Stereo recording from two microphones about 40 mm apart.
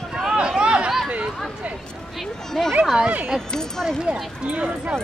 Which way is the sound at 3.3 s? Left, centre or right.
Centre.